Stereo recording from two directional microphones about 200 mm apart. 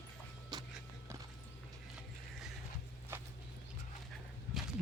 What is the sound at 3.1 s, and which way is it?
Walk, 10° right (ahead or behind).